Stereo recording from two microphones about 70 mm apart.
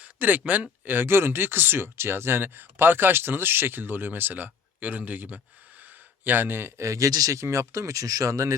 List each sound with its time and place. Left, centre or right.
0.0 s speech: right